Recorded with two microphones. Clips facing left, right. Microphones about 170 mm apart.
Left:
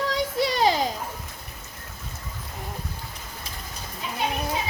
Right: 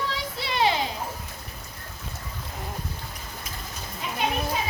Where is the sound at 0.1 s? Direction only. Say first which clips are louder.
Left 7 dB; 40° left (ahead or behind).